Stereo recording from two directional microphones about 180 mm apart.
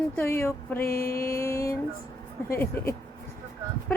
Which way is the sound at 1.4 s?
15° left (ahead or behind).